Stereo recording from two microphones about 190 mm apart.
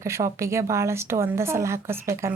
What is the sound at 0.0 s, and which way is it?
Speech, 15° right (ahead or behind).